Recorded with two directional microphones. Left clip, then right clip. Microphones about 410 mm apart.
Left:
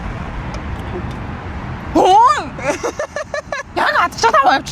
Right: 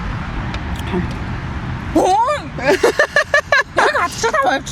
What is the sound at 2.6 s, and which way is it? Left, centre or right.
Vehicle, right.